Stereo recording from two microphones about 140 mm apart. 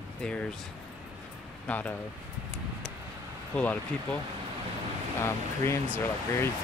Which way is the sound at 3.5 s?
10° left (ahead or behind).